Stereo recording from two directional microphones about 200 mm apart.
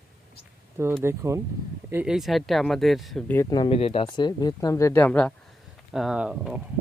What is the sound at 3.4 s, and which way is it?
Speech, 20° left (ahead or behind).